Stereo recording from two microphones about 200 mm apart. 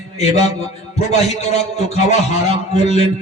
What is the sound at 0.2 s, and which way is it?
A man's voice, 35° left (ahead or behind).